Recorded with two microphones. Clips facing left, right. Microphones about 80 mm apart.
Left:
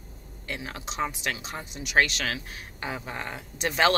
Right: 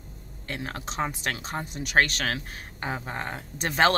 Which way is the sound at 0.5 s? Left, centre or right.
Right.